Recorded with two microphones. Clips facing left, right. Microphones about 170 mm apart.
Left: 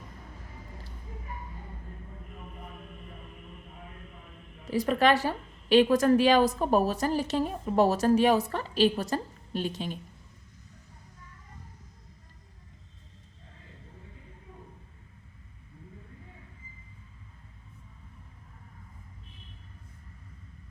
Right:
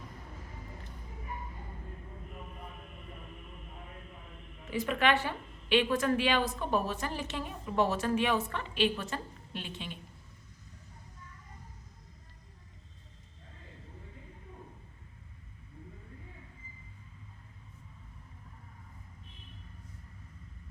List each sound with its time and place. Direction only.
4.7 s a woman's voice: 35° left (ahead or behind)